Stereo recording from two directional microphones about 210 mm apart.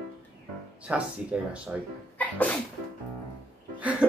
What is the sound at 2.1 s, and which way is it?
Sneeze, 5° left (ahead or behind).